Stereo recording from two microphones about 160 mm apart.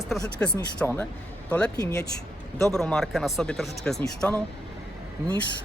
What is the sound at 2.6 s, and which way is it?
Speech, 5° left (ahead or behind).